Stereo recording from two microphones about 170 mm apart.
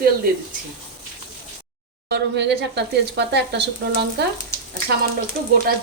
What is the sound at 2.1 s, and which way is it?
Speech, 85° right.